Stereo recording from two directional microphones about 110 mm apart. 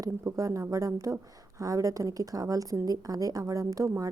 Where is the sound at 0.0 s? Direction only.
30° right (ahead or behind).